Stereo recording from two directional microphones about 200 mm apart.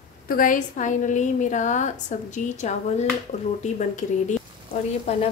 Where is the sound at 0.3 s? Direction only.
40° left (ahead or behind).